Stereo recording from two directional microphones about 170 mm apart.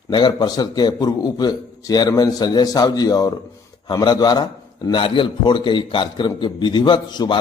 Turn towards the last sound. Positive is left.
turn(degrees=25)  # may be behind; listen again after turning